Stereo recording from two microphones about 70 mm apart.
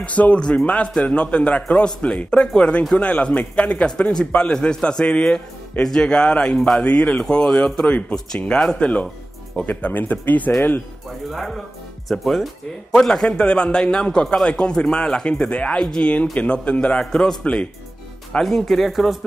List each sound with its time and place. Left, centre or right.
0.0 s a man's voice: centre
11.2 s a man's voice: centre